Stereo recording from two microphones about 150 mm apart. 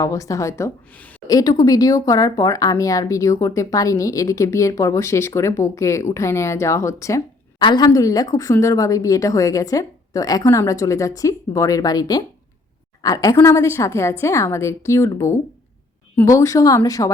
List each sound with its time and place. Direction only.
0.0 s speech: 20° left (ahead or behind)
7.6 s speech: 30° left (ahead or behind)